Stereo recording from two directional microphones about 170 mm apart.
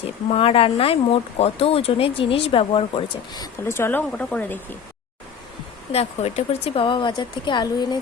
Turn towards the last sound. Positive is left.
turn(degrees=25)  # may be behind; listen again after turning